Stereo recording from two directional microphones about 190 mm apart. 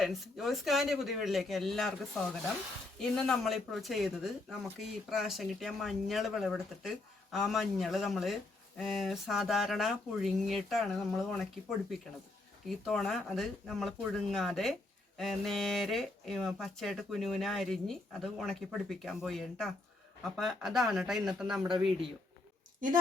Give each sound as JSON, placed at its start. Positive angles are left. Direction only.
{"t": 0.0, "sound": "speech", "side_deg": 0}
{"t": 12.6, "sound": "speech", "side_deg": 0}